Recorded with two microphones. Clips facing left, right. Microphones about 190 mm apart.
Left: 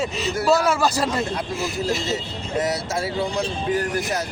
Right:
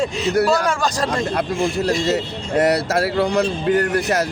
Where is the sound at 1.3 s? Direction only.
65° right (ahead or behind).